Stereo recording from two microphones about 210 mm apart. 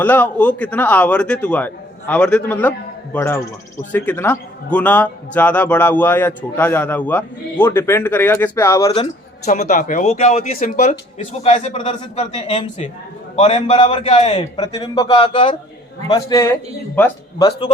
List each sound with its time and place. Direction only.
0.0 s a man's voice: 10° left (ahead or behind)
8.9 s a man's voice: 30° left (ahead or behind); by 17.5 s 15° left (ahead or behind)